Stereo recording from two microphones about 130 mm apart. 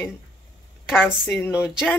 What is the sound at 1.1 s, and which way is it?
Speech, 5° right (ahead or behind).